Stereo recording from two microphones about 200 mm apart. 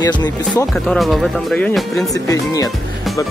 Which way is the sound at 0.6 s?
5° left (ahead or behind).